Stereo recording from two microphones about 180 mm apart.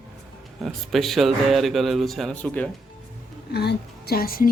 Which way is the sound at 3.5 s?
65° left (ahead or behind).